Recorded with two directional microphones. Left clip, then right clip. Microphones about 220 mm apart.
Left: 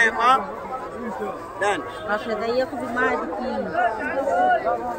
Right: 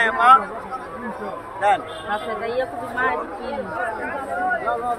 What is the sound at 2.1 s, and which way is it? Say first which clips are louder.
Speech: left 1 dB; 35° left (ahead or behind).